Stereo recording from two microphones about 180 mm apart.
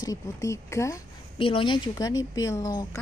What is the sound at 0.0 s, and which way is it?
Speech, 20° left (ahead or behind).